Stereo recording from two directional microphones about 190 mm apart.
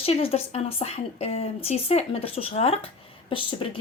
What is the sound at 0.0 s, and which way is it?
Speech, 30° left (ahead or behind).